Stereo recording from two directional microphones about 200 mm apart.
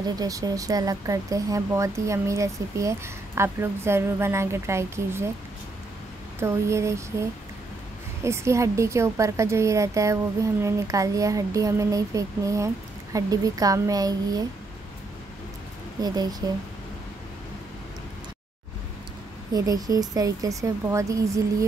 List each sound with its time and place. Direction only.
0.1 s a woman's voice: 20° right (ahead or behind)
6.4 s a woman's voice: 15° right (ahead or behind)
16.0 s speech: 20° right (ahead or behind)
19.5 s a woman's voice: 15° right (ahead or behind)